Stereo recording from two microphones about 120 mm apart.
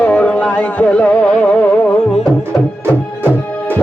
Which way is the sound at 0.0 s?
10° left (ahead or behind).